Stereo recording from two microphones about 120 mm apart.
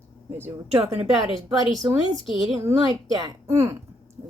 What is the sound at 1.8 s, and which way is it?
A woman's voice, 35° right (ahead or behind).